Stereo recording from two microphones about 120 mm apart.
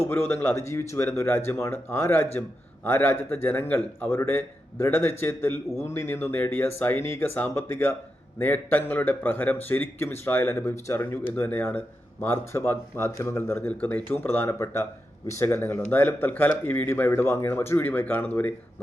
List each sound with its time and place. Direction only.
0.0 s a man's voice: 20° left (ahead or behind)